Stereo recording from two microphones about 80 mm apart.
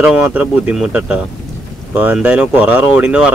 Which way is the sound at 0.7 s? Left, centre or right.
Centre.